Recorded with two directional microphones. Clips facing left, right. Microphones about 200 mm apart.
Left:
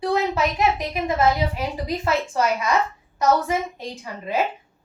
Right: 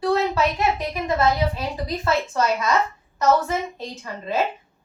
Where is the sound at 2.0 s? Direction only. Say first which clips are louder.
Right 1 dB; 15° left (ahead or behind).